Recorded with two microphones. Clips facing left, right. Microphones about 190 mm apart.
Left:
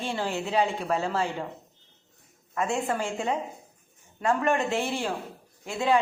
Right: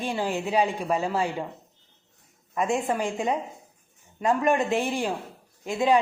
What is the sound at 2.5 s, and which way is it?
Speech, 15° right (ahead or behind).